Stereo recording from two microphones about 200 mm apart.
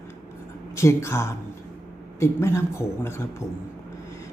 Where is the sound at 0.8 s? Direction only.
15° left (ahead or behind).